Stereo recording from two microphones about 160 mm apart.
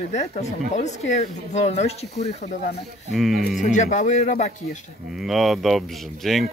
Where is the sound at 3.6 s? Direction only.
50° left (ahead or behind).